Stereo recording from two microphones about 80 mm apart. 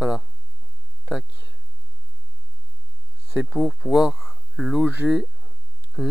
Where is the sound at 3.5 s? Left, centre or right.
Centre.